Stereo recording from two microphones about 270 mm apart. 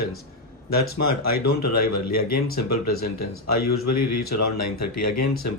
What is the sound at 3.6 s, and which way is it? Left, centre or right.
Speech, left.